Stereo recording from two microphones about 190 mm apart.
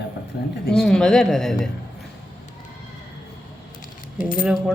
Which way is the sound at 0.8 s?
5° left (ahead or behind).